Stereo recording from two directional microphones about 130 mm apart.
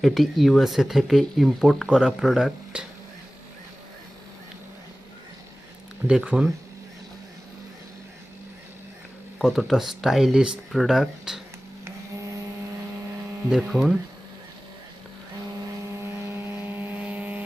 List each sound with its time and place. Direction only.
0.0 s speech: centre (ahead or behind)
6.1 s speech: 10° right (ahead or behind)
9.4 s speech: centre (ahead or behind)
11.9 s printer: 25° right (ahead or behind)
13.5 s speech: 5° right (ahead or behind)
16.0 s vehicle: 20° right (ahead or behind)